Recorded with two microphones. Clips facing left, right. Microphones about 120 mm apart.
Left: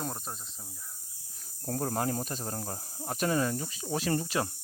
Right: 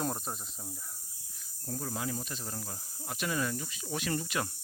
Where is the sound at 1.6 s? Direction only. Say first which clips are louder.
Left 6 dB; 60° left (ahead or behind); by 4.5 s 30° left (ahead or behind).